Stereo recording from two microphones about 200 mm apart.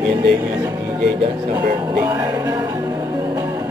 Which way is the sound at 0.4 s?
15° right (ahead or behind).